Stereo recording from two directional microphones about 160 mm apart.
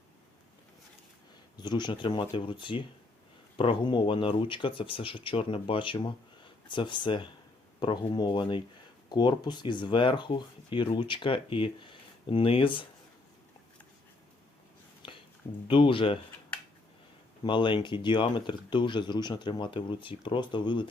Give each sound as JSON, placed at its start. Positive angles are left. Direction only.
{"t": 1.5, "sound": "speech", "side_deg": 25}
{"t": 15.0, "sound": "a sound", "side_deg": 35}
{"t": 15.6, "sound": "speech", "side_deg": 35}
{"t": 17.4, "sound": "speech", "side_deg": 30}